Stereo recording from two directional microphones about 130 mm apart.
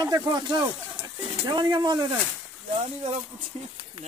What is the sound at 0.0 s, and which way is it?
Speech, 30° right (ahead or behind).